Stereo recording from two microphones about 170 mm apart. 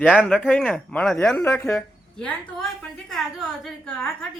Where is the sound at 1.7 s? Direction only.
5° left (ahead or behind).